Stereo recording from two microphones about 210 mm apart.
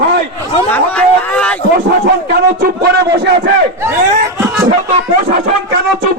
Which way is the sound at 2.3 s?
45° right (ahead or behind).